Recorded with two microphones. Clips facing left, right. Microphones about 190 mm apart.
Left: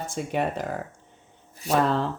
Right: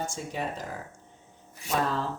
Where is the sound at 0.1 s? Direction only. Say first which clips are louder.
Left 7 dB; 60° left (ahead or behind).